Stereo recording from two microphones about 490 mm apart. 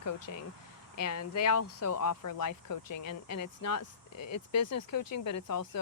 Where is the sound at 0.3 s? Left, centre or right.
Left.